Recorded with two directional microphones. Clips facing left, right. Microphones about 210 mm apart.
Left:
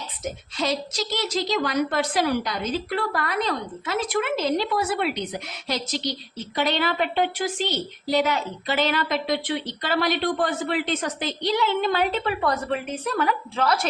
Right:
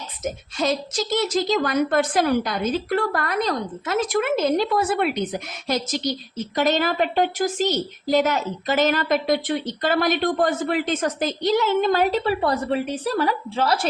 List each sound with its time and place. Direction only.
0.5 s a woman's voice: 50° right (ahead or behind); by 13.8 s 30° right (ahead or behind)